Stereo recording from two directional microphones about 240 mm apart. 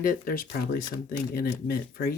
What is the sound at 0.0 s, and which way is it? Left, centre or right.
Speech, left.